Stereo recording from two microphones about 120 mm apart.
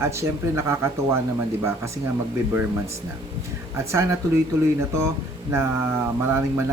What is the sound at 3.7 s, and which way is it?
Speech, 25° right (ahead or behind).